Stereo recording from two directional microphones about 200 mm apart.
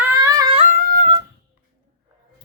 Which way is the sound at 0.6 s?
40° right (ahead or behind).